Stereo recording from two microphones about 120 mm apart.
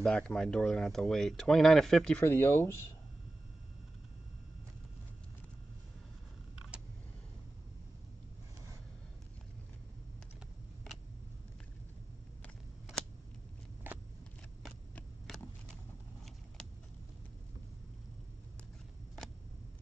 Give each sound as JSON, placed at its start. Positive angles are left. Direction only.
{"t": 0.0, "sound": "speech", "side_deg": 5}
{"t": 2.2, "sound": "speech", "side_deg": 20}
{"t": 13.9, "sound": "a sound", "side_deg": -15}
{"t": 15.0, "sound": "vehicle", "side_deg": 5}